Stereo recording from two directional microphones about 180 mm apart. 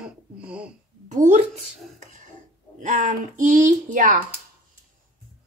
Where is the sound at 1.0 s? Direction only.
40° right (ahead or behind).